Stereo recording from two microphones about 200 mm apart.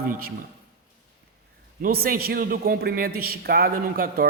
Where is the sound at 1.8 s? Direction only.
50° right (ahead or behind).